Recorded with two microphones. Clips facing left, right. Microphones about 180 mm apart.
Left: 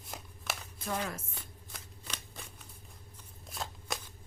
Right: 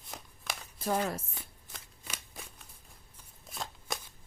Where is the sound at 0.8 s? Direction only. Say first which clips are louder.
Right 5 dB; 40° right (ahead or behind).